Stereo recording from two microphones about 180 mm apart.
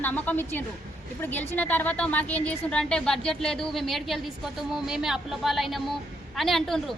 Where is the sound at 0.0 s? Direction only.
10° left (ahead or behind).